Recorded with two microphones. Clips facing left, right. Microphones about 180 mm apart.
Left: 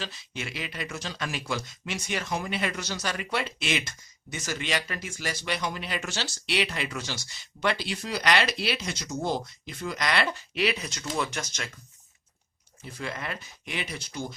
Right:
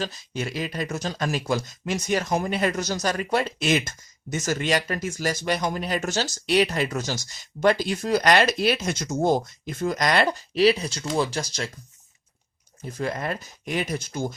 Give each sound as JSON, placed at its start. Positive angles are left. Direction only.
{"t": 0.0, "sound": "speech", "side_deg": -40}
{"t": 12.8, "sound": "speech", "side_deg": -45}